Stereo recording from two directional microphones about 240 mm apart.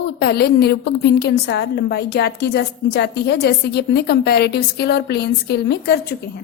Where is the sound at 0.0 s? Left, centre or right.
Left.